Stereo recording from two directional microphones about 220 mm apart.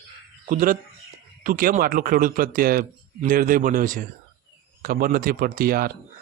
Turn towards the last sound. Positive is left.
turn(degrees=-45)  # may be behind; listen again after turning